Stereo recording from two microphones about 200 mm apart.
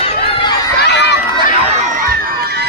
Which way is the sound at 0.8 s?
55° left (ahead or behind).